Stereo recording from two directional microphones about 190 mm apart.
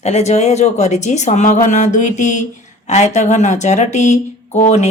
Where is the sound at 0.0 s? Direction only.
35° left (ahead or behind).